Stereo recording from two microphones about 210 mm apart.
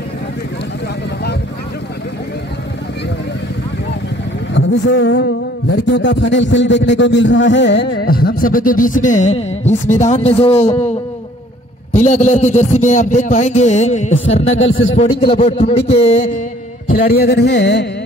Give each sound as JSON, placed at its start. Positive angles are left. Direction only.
{"t": 4.6, "sound": "a man's voice", "side_deg": 60}
{"t": 14.6, "sound": "a man's voice", "side_deg": 70}
{"t": 15.0, "sound": "a man's voice", "side_deg": 30}
{"t": 16.9, "sound": "a sound", "side_deg": 45}